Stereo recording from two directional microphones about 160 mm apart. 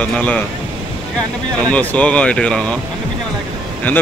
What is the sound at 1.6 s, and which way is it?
Speech, 10° left (ahead or behind).